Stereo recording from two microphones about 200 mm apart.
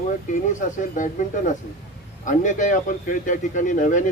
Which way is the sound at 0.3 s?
40° left (ahead or behind).